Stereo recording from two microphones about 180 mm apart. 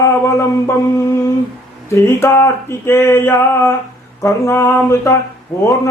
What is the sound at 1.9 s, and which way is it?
A man's voice, 15° left (ahead or behind).